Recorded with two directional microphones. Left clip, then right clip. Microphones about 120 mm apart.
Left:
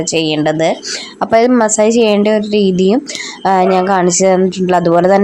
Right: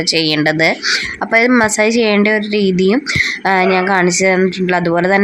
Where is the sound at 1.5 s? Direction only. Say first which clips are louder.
Left 1 dB; 10° left (ahead or behind).